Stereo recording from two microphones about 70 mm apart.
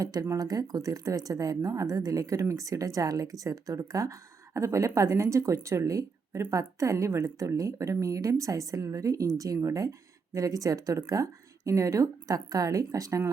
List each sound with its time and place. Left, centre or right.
0.0 s speech: right